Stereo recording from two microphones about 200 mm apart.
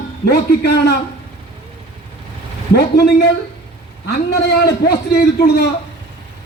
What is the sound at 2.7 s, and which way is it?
Speech, 55° left (ahead or behind).